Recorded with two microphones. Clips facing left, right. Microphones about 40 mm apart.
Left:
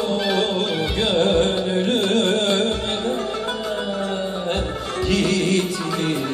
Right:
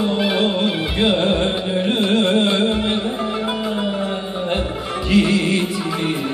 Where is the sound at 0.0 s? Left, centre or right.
Right.